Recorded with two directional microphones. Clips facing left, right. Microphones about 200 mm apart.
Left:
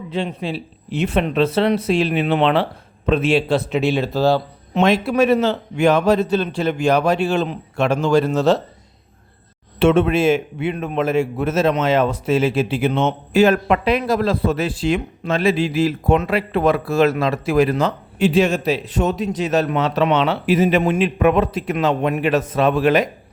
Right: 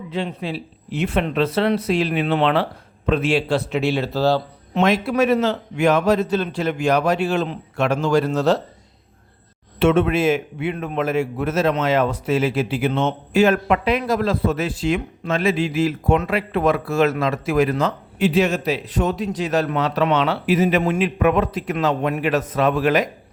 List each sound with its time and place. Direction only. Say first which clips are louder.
0.1 s a man's voice: left 2 dB; 25° left (ahead or behind)
4.8 s a man's voice: left 2 dB; 30° left (ahead or behind)
9.7 s a man's voice: left 2 dB; 30° left (ahead or behind)
13.3 s a man's voice: left 2 dB; 35° left (ahead or behind)